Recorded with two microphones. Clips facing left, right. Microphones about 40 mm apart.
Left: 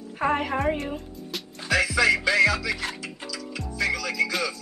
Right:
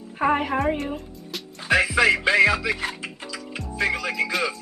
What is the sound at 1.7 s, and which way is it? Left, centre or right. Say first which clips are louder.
Music: right 3 dB; right.